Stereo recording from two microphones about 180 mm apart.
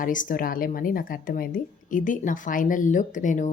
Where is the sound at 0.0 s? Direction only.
50° left (ahead or behind).